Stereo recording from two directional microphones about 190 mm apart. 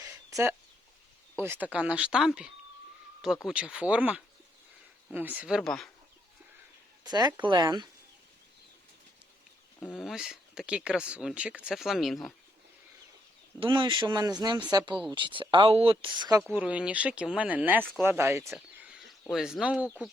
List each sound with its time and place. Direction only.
0.0 s a sound: 15° right (ahead or behind)
1.4 s speech: 10° right (ahead or behind)
7.0 s speech: 20° right (ahead or behind)
10.0 s speech: centre (ahead or behind)
13.6 s speech: 25° right (ahead or behind)
16.4 s speech: 5° right (ahead or behind)
18.5 s a sound: 5° right (ahead or behind)